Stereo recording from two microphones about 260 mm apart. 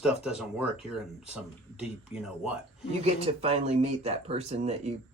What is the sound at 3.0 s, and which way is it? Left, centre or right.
Speech, right.